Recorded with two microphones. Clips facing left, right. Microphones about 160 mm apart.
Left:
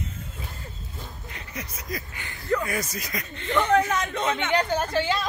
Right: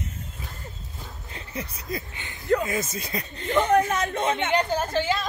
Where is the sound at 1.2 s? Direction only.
30° right (ahead or behind).